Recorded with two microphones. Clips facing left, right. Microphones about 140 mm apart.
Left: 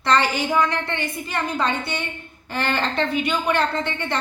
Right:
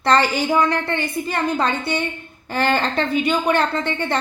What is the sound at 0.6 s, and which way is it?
A woman's voice, 40° right (ahead or behind).